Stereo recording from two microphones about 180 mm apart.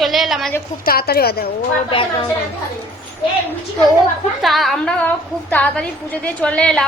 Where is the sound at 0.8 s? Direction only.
60° left (ahead or behind).